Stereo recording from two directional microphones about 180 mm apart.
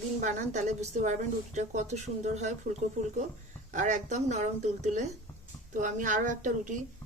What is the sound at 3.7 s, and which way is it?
A woman's voice, 45° right (ahead or behind).